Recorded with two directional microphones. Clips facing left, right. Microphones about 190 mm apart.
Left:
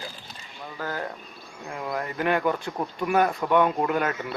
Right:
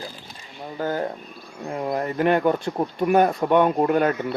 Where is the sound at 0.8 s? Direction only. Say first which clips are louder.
Right 7 dB; 25° right (ahead or behind).